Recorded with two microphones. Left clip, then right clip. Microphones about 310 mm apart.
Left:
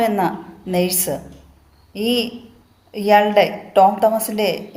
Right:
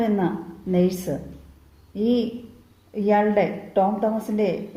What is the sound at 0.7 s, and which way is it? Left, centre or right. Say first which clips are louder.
A woman's voice: left 3 dB; left.